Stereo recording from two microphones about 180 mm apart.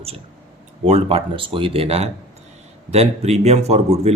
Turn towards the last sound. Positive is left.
turn(degrees=-35)  # may be behind; listen again after turning